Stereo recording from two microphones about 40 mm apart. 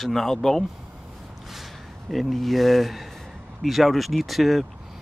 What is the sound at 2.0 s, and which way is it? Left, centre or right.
Speech, centre.